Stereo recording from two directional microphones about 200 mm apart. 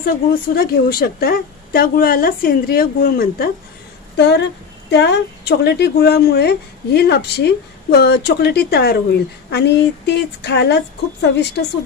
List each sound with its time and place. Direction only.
0.0 s a woman's voice: 50° left (ahead or behind)
4.2 s speech: 60° left (ahead or behind)